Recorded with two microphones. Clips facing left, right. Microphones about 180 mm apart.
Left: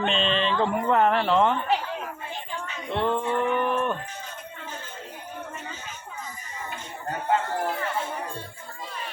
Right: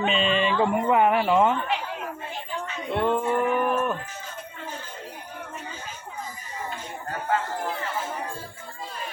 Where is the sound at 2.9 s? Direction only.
10° right (ahead or behind).